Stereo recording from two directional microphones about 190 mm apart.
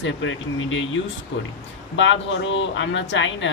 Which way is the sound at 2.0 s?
75° left (ahead or behind).